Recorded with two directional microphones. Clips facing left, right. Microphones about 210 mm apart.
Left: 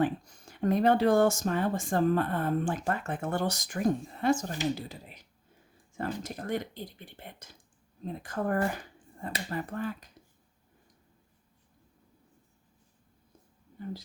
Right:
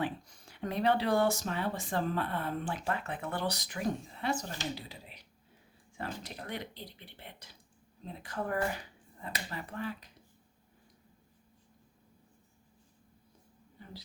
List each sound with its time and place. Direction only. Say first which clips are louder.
0.0 s speech: left 7 dB; 45° left (ahead or behind)